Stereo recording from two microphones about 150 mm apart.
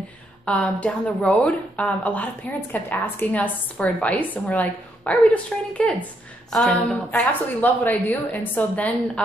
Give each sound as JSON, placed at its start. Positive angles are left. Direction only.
{"t": 0.5, "sound": "speech", "side_deg": 5}